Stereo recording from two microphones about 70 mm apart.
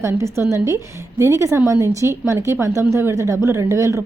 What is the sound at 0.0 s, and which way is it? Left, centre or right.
A woman's voice, right.